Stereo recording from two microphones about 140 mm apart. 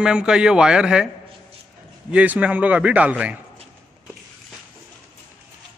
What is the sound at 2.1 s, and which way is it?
A man's voice, 10° right (ahead or behind).